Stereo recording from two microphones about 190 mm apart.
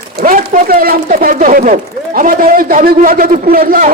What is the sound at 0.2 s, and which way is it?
Speech, 45° right (ahead or behind).